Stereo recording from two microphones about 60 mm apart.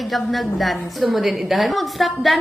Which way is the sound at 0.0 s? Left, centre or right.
Centre.